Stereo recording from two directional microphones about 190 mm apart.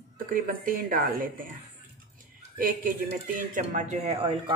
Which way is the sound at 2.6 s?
45° right (ahead or behind).